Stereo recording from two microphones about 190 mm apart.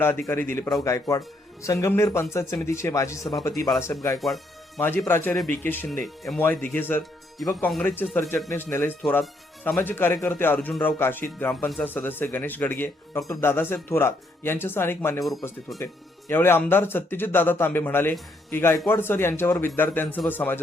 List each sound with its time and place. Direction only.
0.0 s speech: 10° left (ahead or behind)
15.2 s speech: centre (ahead or behind)
16.3 s speech: 10° left (ahead or behind)